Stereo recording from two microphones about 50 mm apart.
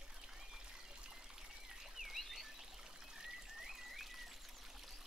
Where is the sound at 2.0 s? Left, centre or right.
Centre.